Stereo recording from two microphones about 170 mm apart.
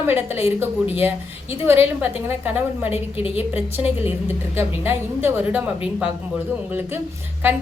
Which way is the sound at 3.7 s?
10° right (ahead or behind).